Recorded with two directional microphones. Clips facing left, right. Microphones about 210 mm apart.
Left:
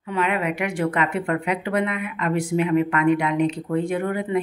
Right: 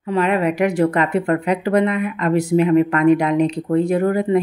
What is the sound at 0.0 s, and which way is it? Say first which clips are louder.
Speech: right 6 dB; 35° right (ahead or behind).